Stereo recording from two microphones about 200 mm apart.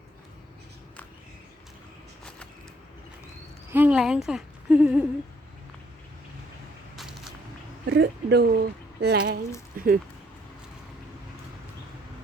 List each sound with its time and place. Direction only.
3.7 s a woman's voice: 10° right (ahead or behind)
6.9 s a sound: centre (ahead or behind)
7.9 s speech: 55° right (ahead or behind)